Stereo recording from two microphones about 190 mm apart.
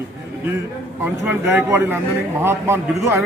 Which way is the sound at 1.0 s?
10° right (ahead or behind).